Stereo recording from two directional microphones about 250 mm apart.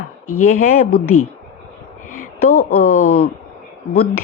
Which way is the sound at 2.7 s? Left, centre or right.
Left.